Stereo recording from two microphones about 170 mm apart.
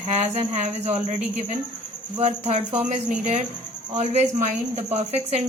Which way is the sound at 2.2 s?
40° right (ahead or behind).